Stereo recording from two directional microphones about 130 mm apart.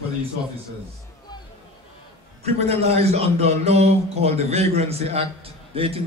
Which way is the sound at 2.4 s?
55° right (ahead or behind).